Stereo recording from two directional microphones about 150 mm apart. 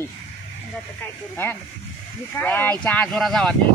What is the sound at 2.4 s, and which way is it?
A man's voice, 10° left (ahead or behind).